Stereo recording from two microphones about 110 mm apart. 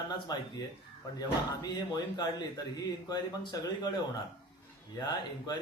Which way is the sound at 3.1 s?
35° left (ahead or behind).